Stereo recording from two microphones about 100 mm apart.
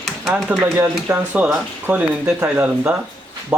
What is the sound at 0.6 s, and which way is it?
Speech, 25° right (ahead or behind).